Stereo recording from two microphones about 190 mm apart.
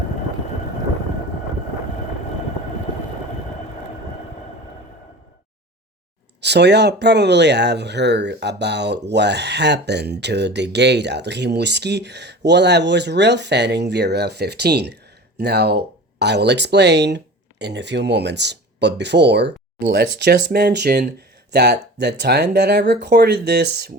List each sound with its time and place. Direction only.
6.4 s speech: 65° right (ahead or behind)